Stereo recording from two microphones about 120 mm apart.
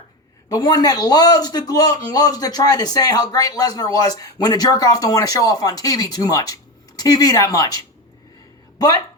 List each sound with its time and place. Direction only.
0.5 s a man's voice: 35° left (ahead or behind)